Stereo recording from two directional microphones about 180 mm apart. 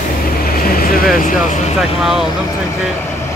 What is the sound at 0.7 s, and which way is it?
Vehicle, 55° left (ahead or behind).